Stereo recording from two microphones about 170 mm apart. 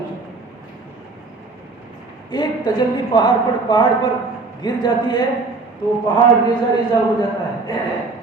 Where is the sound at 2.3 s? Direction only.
25° left (ahead or behind).